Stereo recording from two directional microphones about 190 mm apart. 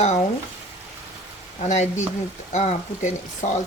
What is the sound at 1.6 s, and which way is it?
Speech, 40° left (ahead or behind).